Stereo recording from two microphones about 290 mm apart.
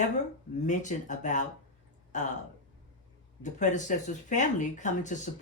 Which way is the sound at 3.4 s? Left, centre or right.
Left.